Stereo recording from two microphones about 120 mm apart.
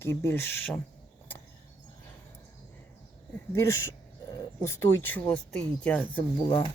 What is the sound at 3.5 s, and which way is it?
Speech, 25° left (ahead or behind).